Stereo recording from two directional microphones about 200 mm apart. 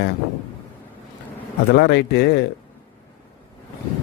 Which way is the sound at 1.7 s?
55° left (ahead or behind).